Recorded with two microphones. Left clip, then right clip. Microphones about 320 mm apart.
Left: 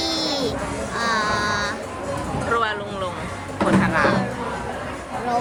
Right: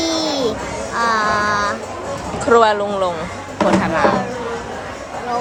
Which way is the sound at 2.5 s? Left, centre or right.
Centre.